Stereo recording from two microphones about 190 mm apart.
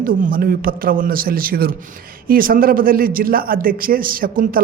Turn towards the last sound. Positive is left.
turn(degrees=-50)  # may be behind; listen again after turning